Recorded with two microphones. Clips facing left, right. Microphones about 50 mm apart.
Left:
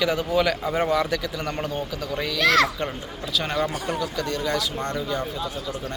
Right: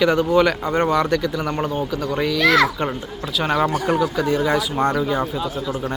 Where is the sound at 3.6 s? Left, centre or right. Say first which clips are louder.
Right 7 dB; right.